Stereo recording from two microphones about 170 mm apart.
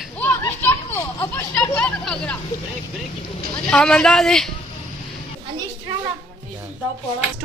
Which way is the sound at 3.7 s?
5° left (ahead or behind).